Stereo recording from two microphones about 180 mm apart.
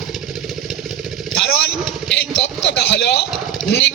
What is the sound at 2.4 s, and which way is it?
Speech, 80° left.